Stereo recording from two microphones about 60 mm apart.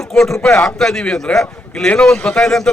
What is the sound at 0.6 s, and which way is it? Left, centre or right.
A man's voice, centre.